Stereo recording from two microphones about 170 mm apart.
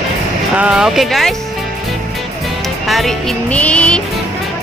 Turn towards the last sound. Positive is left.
turn(degrees=5)  # may be behind; listen again after turning